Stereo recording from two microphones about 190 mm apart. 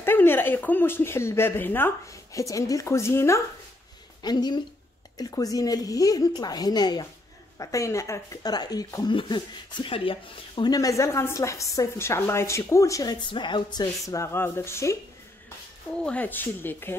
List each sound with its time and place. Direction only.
0.0 s a woman's voice: 10° left (ahead or behind)
16.0 s speech: 5° left (ahead or behind)